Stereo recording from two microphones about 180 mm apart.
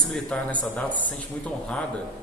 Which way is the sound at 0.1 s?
5° left (ahead or behind).